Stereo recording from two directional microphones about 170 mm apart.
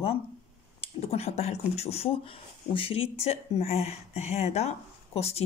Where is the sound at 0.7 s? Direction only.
35° left (ahead or behind).